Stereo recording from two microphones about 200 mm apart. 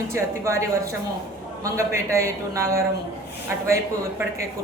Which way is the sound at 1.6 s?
15° right (ahead or behind).